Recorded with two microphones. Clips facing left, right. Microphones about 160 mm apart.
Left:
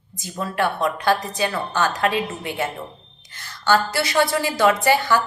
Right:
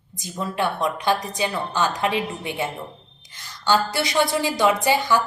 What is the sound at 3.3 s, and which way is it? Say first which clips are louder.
A woman's voice: left 2 dB; 15° right (ahead or behind).